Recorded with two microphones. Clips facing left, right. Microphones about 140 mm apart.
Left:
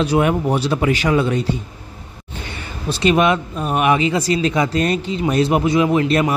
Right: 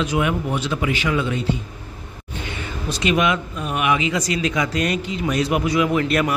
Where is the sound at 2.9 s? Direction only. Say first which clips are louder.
Left 4 dB; 35° left (ahead or behind).